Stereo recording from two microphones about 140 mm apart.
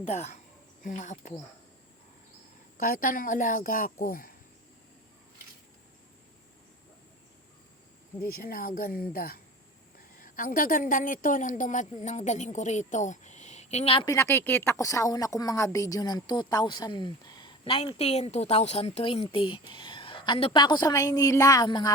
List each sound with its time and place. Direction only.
0.0 s speech: 55° left (ahead or behind)
2.8 s a woman's voice: 85° left
8.3 s a woman's voice: 90° left
10.2 s a woman's voice: 80° left; by 13.9 s 55° left (ahead or behind)
13.9 s a woman's voice: 30° left (ahead or behind)
14.2 s a woman's voice: 15° left (ahead or behind)